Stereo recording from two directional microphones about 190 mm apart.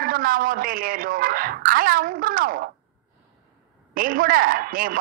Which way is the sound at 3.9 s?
45° right (ahead or behind).